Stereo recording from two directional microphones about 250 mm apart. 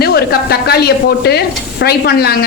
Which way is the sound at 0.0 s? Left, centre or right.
Left.